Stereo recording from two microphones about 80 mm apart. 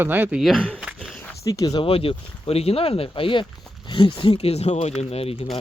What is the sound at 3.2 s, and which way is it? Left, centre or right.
Speech, left.